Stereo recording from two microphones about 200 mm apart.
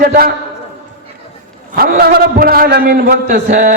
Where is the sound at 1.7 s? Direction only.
50° right (ahead or behind).